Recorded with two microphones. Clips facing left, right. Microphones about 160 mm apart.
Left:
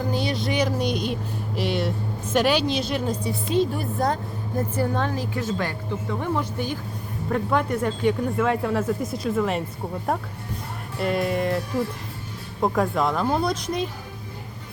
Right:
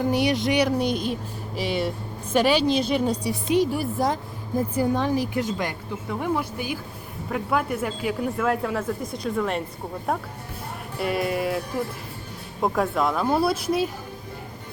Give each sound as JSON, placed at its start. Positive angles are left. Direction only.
{"t": 0.1, "sound": "speech", "side_deg": -15}
{"t": 12.6, "sound": "speech", "side_deg": 0}